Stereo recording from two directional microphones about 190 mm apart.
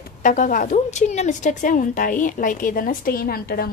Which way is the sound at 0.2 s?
45° left (ahead or behind).